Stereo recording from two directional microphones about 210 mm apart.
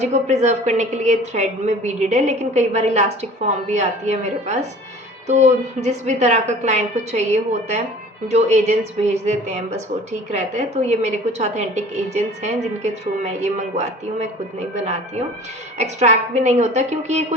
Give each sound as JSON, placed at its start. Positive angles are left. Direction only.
{"t": 0.0, "sound": "a woman's voice", "side_deg": -35}
{"t": 15.8, "sound": "a woman's voice", "side_deg": -30}